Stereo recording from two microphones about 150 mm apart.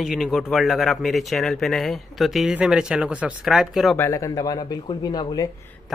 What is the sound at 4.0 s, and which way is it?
Speech, 20° left (ahead or behind).